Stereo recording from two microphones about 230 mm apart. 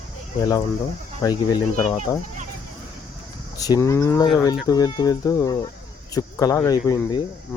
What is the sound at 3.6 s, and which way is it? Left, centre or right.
Speech, centre.